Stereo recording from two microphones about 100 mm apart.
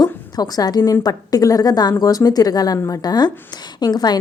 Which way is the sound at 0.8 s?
25° left (ahead or behind).